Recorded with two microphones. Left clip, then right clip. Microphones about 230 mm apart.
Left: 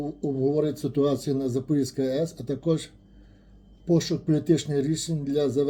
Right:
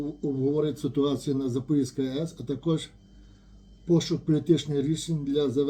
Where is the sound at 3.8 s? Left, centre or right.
Centre.